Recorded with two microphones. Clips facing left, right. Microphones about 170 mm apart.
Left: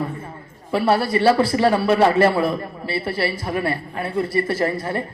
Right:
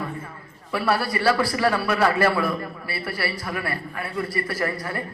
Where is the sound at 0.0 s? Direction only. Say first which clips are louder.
Left 4 dB; 25° left (ahead or behind).